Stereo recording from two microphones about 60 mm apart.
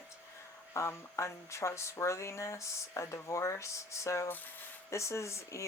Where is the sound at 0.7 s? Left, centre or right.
Left.